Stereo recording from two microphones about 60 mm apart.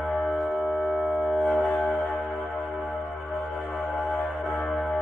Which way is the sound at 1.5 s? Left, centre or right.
Left.